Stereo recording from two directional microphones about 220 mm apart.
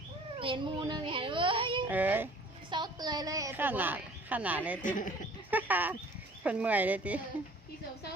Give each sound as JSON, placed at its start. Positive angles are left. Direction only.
{"t": 0.3, "sound": "speech", "side_deg": -25}
{"t": 1.9, "sound": "a woman's voice", "side_deg": -10}
{"t": 2.6, "sound": "a woman's voice", "side_deg": -20}
{"t": 5.5, "sound": "a sound", "side_deg": -10}
{"t": 6.4, "sound": "a woman's voice", "side_deg": -5}